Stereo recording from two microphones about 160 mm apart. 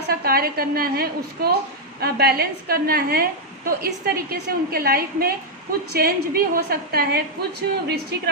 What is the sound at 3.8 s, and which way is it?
A woman's voice, 80° right.